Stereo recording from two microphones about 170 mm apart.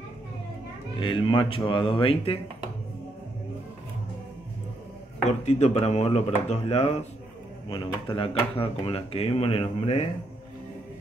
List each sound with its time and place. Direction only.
0.9 s speech: 30° left (ahead or behind)
5.2 s speech: 40° left (ahead or behind)